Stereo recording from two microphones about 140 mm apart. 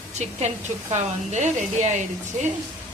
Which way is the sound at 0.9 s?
60° right (ahead or behind).